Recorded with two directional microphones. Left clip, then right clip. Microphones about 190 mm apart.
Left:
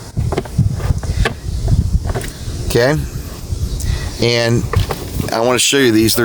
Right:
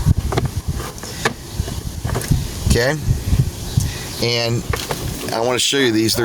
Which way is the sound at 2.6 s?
60° left (ahead or behind).